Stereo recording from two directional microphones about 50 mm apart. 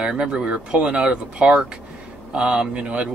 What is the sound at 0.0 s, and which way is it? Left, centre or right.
Speech, centre.